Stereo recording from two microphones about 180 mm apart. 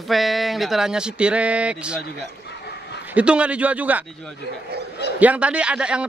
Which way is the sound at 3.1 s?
5° right (ahead or behind).